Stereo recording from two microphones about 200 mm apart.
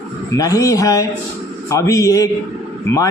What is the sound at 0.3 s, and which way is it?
Speech, 15° left (ahead or behind).